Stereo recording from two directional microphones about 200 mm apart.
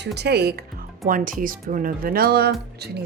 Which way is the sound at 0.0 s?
55° right (ahead or behind).